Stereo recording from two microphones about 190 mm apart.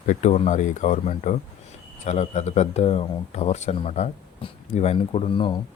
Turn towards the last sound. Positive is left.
turn(degrees=25)  # may be behind; listen again after turning